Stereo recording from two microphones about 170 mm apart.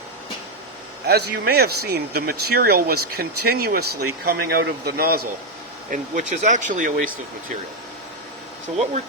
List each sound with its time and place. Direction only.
1.0 s speech: 70° right (ahead or behind)
5.9 s speech: 45° right (ahead or behind)